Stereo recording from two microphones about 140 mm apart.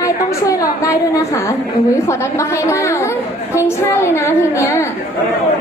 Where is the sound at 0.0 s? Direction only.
25° left (ahead or behind).